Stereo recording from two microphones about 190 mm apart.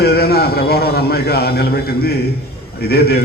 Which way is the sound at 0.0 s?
55° left (ahead or behind).